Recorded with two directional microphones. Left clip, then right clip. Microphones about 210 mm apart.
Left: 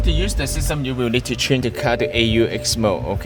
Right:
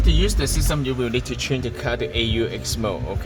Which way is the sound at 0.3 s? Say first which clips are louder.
Left 1 dB; 40° left (ahead or behind).